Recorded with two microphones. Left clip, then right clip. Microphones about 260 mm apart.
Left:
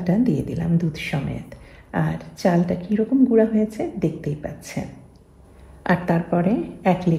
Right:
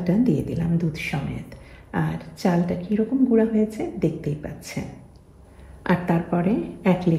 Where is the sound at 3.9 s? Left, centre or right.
Centre.